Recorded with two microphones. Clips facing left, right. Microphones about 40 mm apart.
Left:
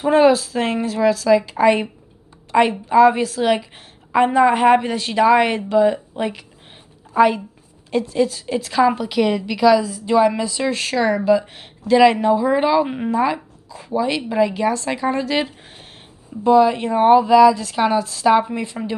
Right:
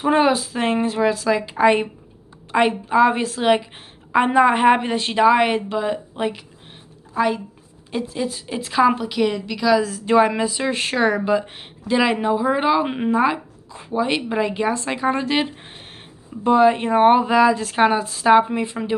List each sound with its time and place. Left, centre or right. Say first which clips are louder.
0.0 s a woman's voice: left 3 dB; centre
5.2 s a woman's voice: left 1 dB; centre
7.2 s a woman's voice: left 6 dB; centre
7.9 s a woman's voice: left 6 dB; centre
9.1 s a woman's voice: left 2 dB; centre
9.8 s a woman's voice: even; right
12.8 s a woman's voice: right 1 dB; right
13.1 s a woman's voice: right 2 dB; right